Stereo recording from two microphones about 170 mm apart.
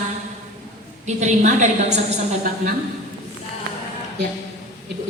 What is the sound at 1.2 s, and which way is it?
Speech, 45° right (ahead or behind).